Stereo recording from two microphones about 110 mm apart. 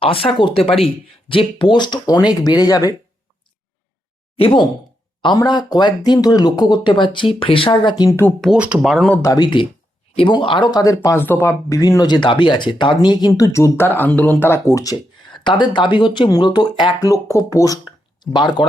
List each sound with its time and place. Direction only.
0.0 s speech: 55° left (ahead or behind); by 2.9 s 35° left (ahead or behind)
4.4 s speech: 55° left (ahead or behind)
5.2 s speech: 40° left (ahead or behind)
8.5 s speech: 10° right (ahead or behind)
8.9 s speech: centre (ahead or behind)
9.2 s speech: 35° left (ahead or behind)
15.3 s speech: 45° left (ahead or behind)
17.1 s speech: 30° left (ahead or behind)
18.2 s speech: 45° left (ahead or behind)